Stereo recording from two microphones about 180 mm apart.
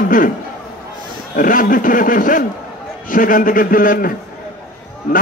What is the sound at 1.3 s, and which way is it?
Speech, 50° left (ahead or behind).